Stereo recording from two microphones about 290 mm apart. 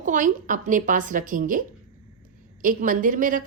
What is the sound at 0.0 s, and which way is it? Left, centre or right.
A woman's voice, right.